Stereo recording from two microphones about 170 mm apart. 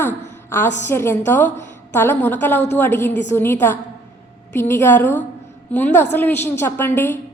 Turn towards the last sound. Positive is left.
turn(degrees=10)  # may be behind; listen again after turning